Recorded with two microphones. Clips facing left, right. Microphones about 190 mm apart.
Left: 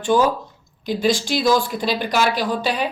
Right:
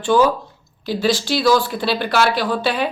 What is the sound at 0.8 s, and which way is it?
Speech, 50° left (ahead or behind).